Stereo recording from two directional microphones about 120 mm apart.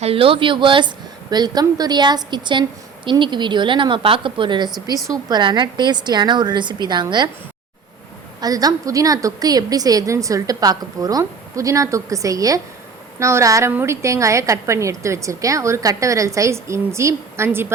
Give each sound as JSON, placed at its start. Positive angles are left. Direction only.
{"t": 0.0, "sound": "speech", "side_deg": -50}
{"t": 8.4, "sound": "a woman's voice", "side_deg": -30}